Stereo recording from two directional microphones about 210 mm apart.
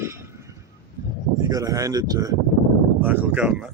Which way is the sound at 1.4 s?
15° right (ahead or behind).